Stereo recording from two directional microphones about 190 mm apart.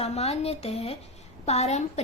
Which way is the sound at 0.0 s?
35° left (ahead or behind).